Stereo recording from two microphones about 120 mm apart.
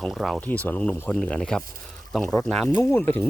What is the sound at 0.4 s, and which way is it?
Speech, 10° left (ahead or behind).